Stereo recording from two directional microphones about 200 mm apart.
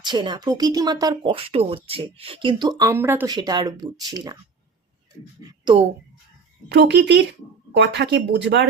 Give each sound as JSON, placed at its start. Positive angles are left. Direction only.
{"t": 0.0, "sound": "speech", "side_deg": -25}
{"t": 3.3, "sound": "speech", "side_deg": -20}
{"t": 5.4, "sound": "speech", "side_deg": -20}
{"t": 6.7, "sound": "speech", "side_deg": -60}